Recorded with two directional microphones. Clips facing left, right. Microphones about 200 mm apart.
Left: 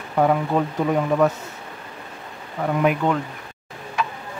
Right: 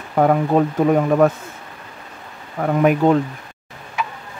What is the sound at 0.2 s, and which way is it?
Speech, 50° right (ahead or behind).